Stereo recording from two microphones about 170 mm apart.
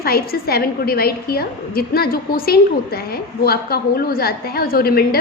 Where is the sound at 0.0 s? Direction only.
65° left (ahead or behind).